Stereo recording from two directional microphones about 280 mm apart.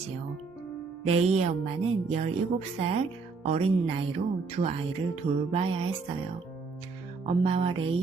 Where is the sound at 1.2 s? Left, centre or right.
Right.